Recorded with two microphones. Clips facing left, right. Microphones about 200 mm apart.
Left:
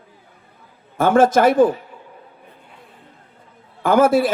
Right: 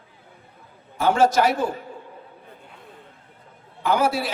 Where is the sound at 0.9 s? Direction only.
50° left (ahead or behind).